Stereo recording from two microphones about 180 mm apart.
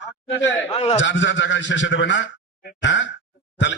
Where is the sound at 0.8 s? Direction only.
40° left (ahead or behind).